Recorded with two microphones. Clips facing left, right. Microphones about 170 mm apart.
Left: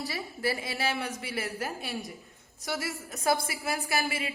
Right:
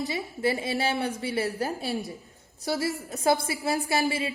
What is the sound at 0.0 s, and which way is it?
A woman's voice, 20° right (ahead or behind).